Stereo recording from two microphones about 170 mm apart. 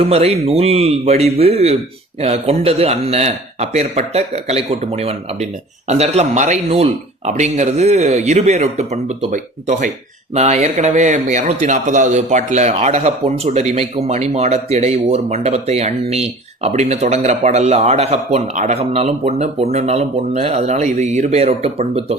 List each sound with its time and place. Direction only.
0.0 s speech: 35° right (ahead or behind)